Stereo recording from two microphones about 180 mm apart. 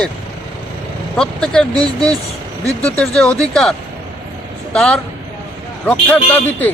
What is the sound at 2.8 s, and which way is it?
Speech, 5° left (ahead or behind).